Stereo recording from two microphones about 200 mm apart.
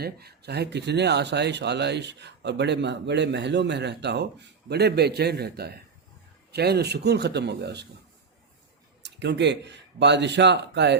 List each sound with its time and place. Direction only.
0.0 s speech: 50° right (ahead or behind)
9.0 s speech: 60° right (ahead or behind)